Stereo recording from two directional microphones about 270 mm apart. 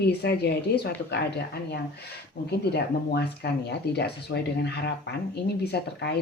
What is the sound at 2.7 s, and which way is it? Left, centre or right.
Speech, left.